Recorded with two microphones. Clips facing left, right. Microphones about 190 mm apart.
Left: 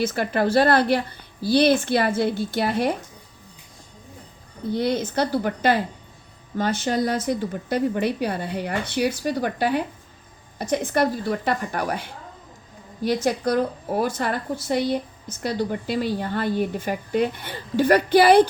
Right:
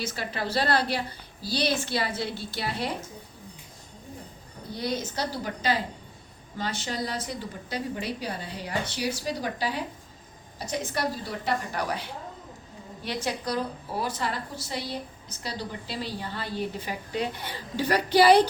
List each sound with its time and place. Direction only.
0.0 s a woman's voice: 55° left (ahead or behind)
4.7 s a woman's voice: 60° left (ahead or behind)